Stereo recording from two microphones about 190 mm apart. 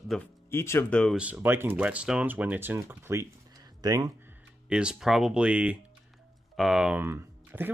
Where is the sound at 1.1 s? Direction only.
5° right (ahead or behind).